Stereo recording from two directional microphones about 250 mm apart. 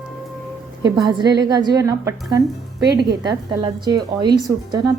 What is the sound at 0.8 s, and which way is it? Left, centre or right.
A woman's voice, centre.